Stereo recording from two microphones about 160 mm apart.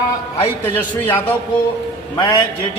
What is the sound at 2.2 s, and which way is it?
Speech, 25° left (ahead or behind).